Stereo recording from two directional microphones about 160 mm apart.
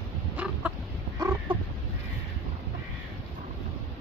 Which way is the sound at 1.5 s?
35° right (ahead or behind).